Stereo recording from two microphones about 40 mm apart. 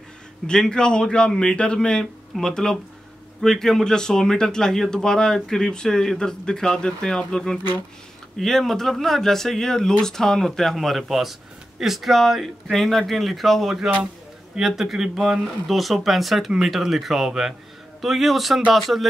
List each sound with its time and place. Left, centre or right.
0.5 s a man's voice: left; by 13.7 s centre
14.8 s speech: centre